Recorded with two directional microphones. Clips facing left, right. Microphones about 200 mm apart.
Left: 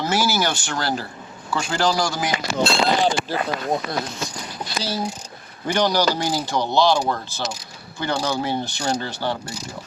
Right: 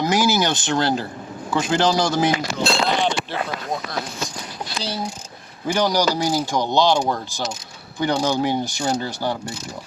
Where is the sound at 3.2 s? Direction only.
Centre (ahead or behind).